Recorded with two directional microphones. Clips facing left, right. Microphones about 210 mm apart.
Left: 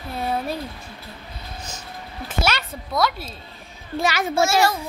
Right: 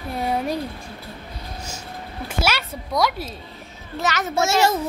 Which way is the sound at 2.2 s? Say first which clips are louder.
Even; 10° right (ahead or behind).